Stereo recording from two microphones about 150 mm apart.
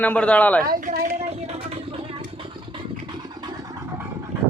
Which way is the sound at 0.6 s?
75° right (ahead or behind).